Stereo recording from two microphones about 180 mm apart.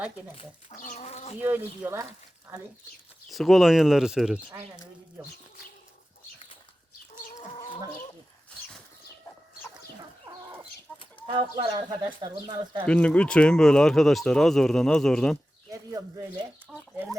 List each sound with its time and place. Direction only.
0.3 s speech: 45° left (ahead or behind)
1.4 s speech: 10° right (ahead or behind)
3.2 s speech: centre (ahead or behind)
7.5 s chicken: 30° left (ahead or behind)
10.9 s chicken: 5° left (ahead or behind)
11.3 s speech: 25° right (ahead or behind)
12.8 s speech: 5° left (ahead or behind)
15.7 s speech: 20° right (ahead or behind)
16.7 s speech: 5° right (ahead or behind)